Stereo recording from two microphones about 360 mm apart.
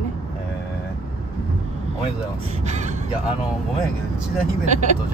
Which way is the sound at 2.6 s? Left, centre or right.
Centre.